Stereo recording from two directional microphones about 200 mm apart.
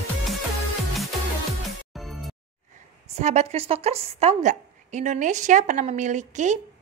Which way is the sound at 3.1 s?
35° right (ahead or behind).